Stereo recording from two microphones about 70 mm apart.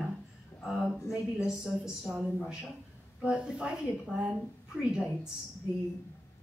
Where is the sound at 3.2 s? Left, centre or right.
Centre.